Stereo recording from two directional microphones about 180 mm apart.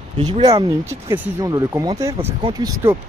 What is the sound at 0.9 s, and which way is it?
Speech, 10° right (ahead or behind).